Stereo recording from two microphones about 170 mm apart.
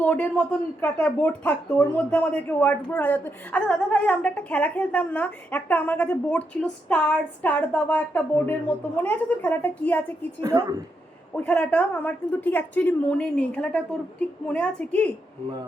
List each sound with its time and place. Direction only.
0.0 s a woman's voice: 10° left (ahead or behind)
10.4 s a woman's voice: 20° right (ahead or behind)
11.3 s a woman's voice: 10° left (ahead or behind)